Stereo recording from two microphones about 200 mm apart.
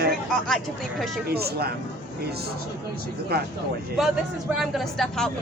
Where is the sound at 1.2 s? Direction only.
50° right (ahead or behind).